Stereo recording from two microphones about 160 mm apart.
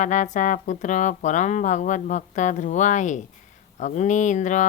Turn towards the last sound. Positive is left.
turn(degrees=50)  # may be behind; listen again after turning